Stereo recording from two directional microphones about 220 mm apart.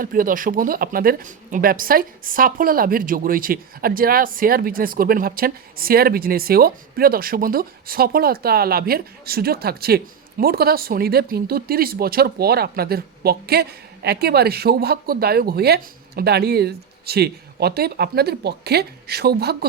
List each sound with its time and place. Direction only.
0.0 s a woman's voice: 40° right (ahead or behind)